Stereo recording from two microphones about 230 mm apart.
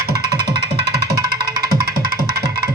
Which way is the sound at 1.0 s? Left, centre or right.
Right.